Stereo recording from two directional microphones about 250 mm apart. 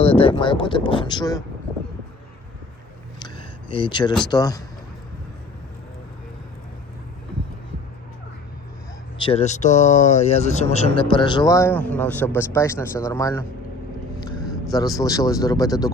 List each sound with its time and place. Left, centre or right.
0.0 s speech: left
3.2 s a sound: centre
4.3 s a man's voice: centre
9.2 s a man's voice: left